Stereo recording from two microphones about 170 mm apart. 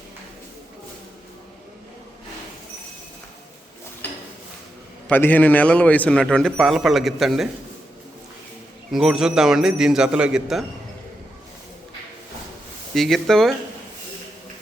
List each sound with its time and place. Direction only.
5.0 s a man's voice: 10° left (ahead or behind)
8.9 s a man's voice: centre (ahead or behind)
12.9 s speech: centre (ahead or behind)